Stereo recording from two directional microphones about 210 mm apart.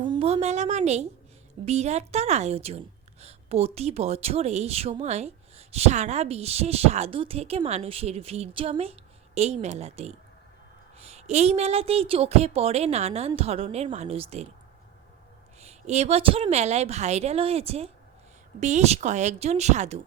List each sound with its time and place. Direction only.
0.0 s a woman's voice: 25° right (ahead or behind)
15.6 s a woman's voice: 30° right (ahead or behind)